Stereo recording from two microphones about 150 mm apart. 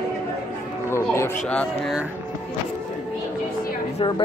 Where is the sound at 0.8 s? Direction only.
15° left (ahead or behind).